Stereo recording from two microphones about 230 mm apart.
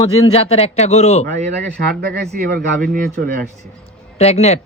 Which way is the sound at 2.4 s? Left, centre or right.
Right.